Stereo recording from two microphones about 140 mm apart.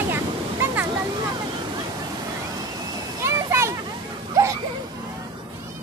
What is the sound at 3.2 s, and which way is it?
Children playing, 20° right (ahead or behind).